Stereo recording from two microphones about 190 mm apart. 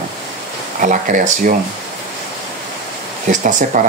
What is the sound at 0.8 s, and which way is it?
Speech, 45° right (ahead or behind).